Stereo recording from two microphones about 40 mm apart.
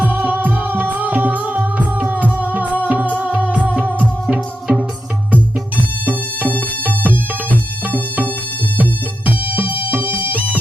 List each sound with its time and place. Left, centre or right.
0.0 s music: right
4.3 s music: centre
5.3 s music: right